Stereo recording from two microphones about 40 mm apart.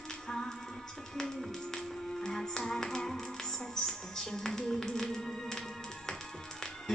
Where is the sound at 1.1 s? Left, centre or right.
Centre.